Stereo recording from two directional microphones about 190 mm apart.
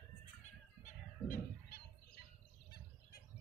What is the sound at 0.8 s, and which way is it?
Fowl, 45° left (ahead or behind).